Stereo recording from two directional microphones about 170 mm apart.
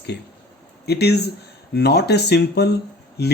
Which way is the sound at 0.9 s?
75° left (ahead or behind).